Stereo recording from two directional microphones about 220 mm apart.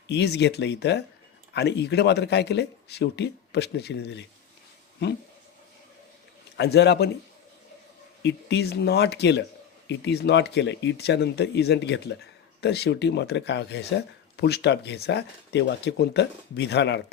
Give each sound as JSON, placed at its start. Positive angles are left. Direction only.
{"t": 0.1, "sound": "speech", "side_deg": 50}
{"t": 6.6, "sound": "speech", "side_deg": 50}
{"t": 8.2, "sound": "speech", "side_deg": 50}